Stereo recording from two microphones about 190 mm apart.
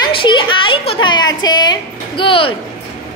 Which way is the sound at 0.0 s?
25° left (ahead or behind).